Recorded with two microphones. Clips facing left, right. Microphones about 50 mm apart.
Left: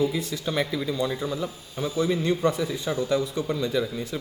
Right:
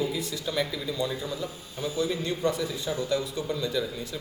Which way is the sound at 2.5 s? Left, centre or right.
Left.